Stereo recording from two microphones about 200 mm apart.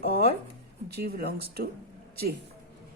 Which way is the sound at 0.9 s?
55° right (ahead or behind).